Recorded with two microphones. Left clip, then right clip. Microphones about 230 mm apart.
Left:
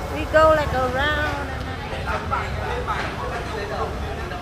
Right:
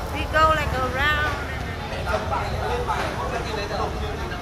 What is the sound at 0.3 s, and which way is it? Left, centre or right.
Vehicle, left.